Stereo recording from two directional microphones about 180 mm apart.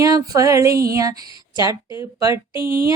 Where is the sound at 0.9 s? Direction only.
20° right (ahead or behind).